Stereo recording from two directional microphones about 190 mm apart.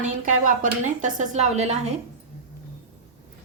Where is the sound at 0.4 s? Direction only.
40° right (ahead or behind).